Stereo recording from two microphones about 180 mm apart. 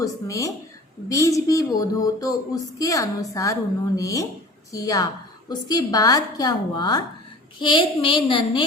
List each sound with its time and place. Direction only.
0.0 s a woman's voice: 20° left (ahead or behind)